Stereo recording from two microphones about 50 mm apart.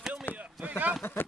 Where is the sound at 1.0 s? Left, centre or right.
Left.